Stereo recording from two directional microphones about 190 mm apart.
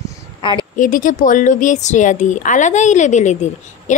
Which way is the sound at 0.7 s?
45° left (ahead or behind).